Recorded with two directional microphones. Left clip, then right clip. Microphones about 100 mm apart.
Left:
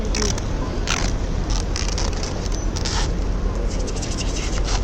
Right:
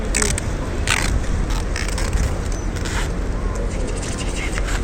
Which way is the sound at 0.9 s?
45° left (ahead or behind).